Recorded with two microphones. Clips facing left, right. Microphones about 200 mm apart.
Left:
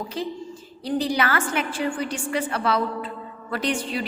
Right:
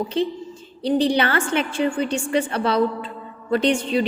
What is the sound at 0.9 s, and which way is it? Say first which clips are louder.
A woman's voice: right 5 dB; 30° right (ahead or behind).